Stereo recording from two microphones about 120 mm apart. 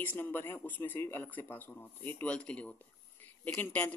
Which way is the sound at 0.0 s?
15° left (ahead or behind).